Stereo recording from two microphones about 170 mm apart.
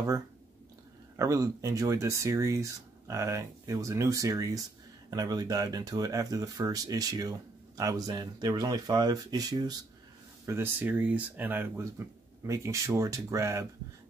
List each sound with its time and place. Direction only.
1.1 s speech: 20° right (ahead or behind)